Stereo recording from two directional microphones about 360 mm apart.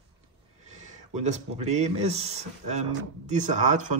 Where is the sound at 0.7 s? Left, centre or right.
Centre.